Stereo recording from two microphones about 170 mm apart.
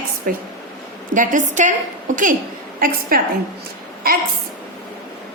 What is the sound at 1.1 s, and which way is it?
A woman's voice, 50° right (ahead or behind).